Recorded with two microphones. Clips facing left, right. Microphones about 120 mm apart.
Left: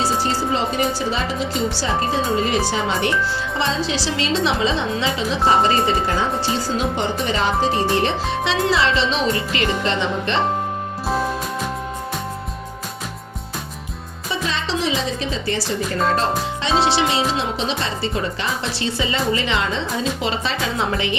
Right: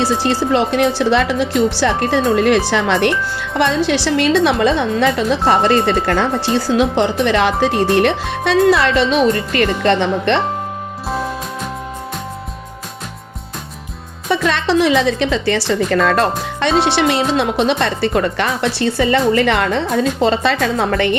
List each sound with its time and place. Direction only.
0.2 s speech: 75° right (ahead or behind)
11.1 s music: centre (ahead or behind)
14.3 s speech: 70° right (ahead or behind)
16.9 s speech: 60° right (ahead or behind)